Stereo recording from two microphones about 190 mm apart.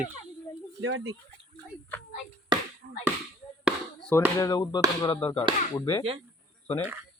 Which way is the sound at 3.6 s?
5° left (ahead or behind).